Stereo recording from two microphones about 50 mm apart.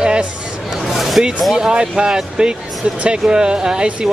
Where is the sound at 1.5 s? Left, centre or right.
Centre.